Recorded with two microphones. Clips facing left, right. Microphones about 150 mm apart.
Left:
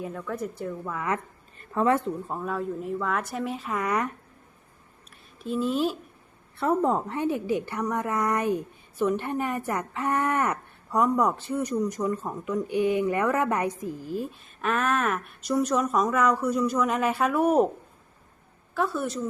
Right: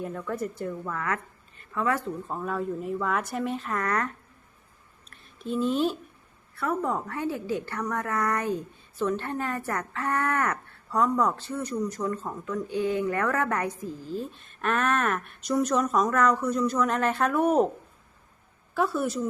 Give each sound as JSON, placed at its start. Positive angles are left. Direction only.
{"t": 0.0, "sound": "speech", "side_deg": 0}
{"t": 0.9, "sound": "speech", "side_deg": 20}
{"t": 2.2, "sound": "speech", "side_deg": 5}
{"t": 5.4, "sound": "speech", "side_deg": 5}
{"t": 6.6, "sound": "a woman's voice", "side_deg": 25}
{"t": 14.6, "sound": "speech", "side_deg": 0}
{"t": 18.7, "sound": "speech", "side_deg": -5}